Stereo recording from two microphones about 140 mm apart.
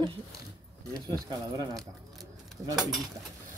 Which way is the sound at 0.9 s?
25° right (ahead or behind).